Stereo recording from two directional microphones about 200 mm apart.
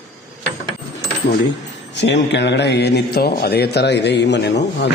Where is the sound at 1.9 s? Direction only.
60° left (ahead or behind).